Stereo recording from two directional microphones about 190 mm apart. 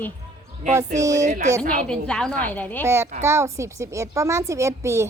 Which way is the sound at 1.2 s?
40° right (ahead or behind).